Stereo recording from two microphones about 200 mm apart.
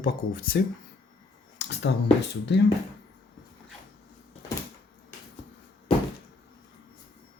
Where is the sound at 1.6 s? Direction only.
60° left (ahead or behind).